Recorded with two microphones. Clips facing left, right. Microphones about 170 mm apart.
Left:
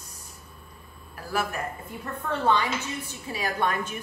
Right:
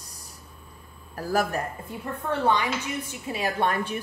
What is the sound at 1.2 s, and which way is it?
Speech, 40° right (ahead or behind).